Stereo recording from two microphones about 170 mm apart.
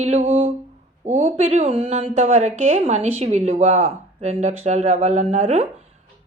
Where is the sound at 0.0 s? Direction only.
40° right (ahead or behind).